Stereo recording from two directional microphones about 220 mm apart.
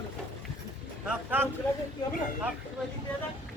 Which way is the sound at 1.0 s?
10° right (ahead or behind).